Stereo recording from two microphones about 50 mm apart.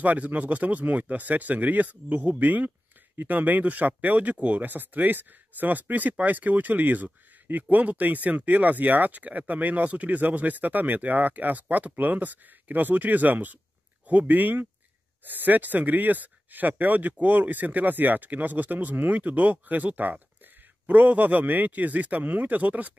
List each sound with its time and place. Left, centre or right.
0.0 s speech: right